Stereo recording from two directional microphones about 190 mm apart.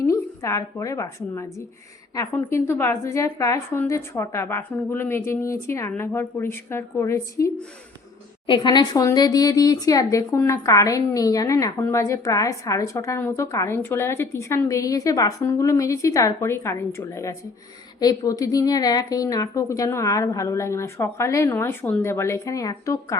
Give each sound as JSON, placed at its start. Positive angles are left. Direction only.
{"t": 0.0, "sound": "a woman's voice", "side_deg": 15}